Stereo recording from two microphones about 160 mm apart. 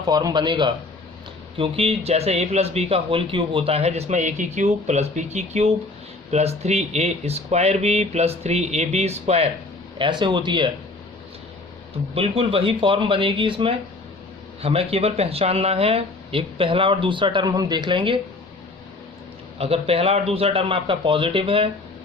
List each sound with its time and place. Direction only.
0.0 s a man's voice: 25° right (ahead or behind); by 9.5 s 40° right (ahead or behind)
10.0 s a man's voice: 30° right (ahead or behind)
12.1 s speech: 35° right (ahead or behind)
19.5 s speech: 40° right (ahead or behind)